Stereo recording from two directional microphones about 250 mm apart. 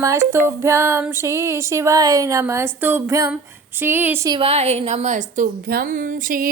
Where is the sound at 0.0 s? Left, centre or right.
Centre.